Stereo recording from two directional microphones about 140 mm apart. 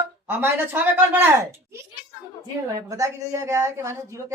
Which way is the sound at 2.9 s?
20° right (ahead or behind).